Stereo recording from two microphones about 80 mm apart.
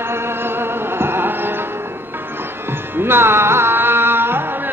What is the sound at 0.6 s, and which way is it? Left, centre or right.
Music, right.